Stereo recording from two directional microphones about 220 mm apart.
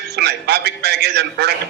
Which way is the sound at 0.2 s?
45° right (ahead or behind).